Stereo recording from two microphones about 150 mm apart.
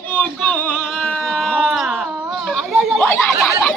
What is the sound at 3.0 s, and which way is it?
Speech, 15° left (ahead or behind).